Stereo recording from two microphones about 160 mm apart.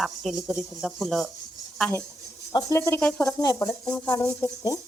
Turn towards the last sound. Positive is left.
turn(degrees=20)  # may be behind; listen again after turning